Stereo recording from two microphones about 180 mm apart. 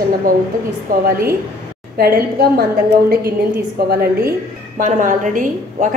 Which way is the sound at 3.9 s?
60° right (ahead or behind).